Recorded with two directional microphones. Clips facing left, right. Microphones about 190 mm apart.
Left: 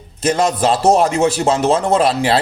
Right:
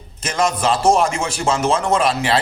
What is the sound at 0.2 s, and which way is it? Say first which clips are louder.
A man's voice: left 4 dB; 35° left (ahead or behind).